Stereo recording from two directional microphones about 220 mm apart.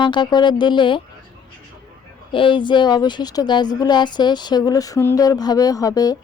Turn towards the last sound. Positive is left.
turn(degrees=15)  # may be behind; listen again after turning